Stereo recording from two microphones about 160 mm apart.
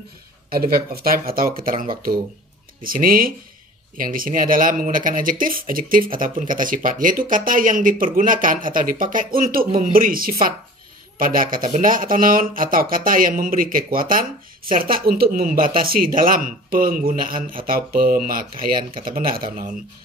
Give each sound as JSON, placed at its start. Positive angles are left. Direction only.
{"t": 0.5, "sound": "speech", "side_deg": -65}